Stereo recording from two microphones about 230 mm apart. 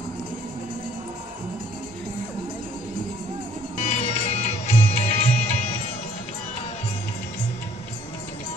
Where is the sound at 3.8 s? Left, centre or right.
Left.